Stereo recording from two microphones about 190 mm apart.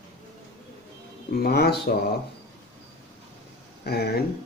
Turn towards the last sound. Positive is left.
turn(degrees=55)  # may be behind; listen again after turning